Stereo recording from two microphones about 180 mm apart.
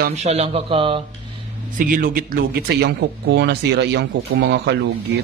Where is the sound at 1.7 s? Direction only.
50° right (ahead or behind); by 4.8 s 70° right (ahead or behind).